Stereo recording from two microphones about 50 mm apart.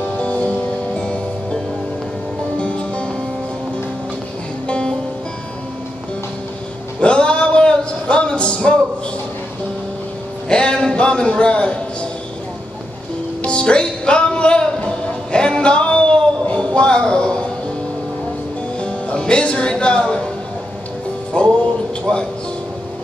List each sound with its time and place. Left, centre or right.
0.0 s music: left
4.6 s music: centre
7.0 s music: centre
10.5 s a sound: centre
13.4 s music: left
18.8 s music: left
21.3 s music: centre